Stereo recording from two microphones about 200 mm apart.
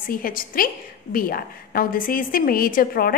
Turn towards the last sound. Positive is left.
turn(degrees=45)  # may be behind; listen again after turning